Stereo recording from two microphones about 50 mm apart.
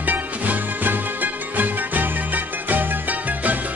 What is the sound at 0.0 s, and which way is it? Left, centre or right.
Music, right.